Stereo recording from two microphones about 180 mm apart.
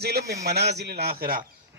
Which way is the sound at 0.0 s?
60° right (ahead or behind).